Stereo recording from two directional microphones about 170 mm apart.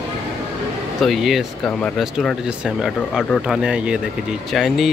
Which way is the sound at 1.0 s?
Centre (ahead or behind).